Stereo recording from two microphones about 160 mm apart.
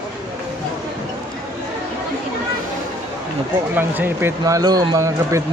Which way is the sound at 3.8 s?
15° right (ahead or behind).